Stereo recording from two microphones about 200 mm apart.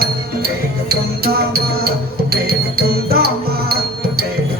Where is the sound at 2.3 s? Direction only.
50° right (ahead or behind).